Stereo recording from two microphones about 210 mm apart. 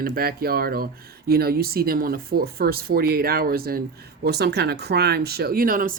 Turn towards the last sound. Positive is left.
turn(degrees=-40)  # may be behind; listen again after turning